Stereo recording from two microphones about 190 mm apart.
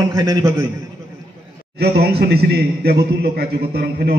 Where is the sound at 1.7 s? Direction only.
55° right (ahead or behind).